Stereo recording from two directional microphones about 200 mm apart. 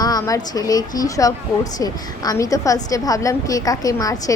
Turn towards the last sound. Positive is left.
turn(degrees=15)  # may be behind; listen again after turning